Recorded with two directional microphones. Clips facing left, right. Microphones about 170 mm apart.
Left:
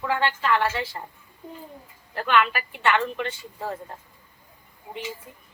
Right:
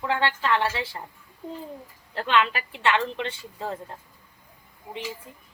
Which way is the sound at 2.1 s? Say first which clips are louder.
Left 1 dB; 25° right (ahead or behind).